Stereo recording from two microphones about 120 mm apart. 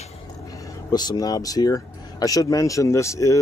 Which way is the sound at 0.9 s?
35° left (ahead or behind).